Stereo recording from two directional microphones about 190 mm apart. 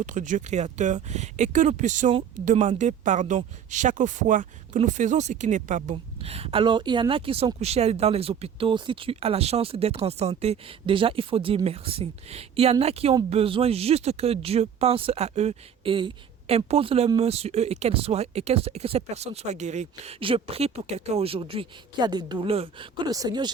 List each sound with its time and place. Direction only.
0.0 s speech: 40° right (ahead or behind); by 23.5 s 20° right (ahead or behind)